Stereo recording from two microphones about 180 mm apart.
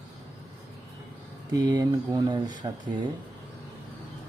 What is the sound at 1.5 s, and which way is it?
Speech, 20° right (ahead or behind).